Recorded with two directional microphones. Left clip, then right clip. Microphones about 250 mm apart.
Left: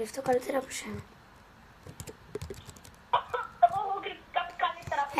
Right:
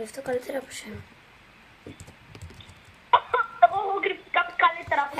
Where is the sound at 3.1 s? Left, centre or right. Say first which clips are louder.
Right 8 dB; right.